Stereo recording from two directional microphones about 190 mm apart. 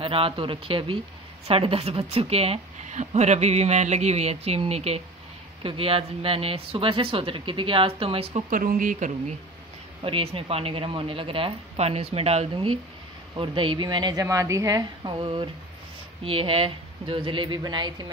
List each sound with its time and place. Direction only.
0.0 s a woman's voice: 30° right (ahead or behind)
8.5 s speech: 45° right (ahead or behind)
10.0 s speech: 30° right (ahead or behind)